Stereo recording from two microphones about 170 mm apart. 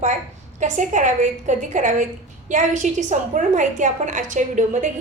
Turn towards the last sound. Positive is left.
turn(degrees=-45)  # may be behind; listen again after turning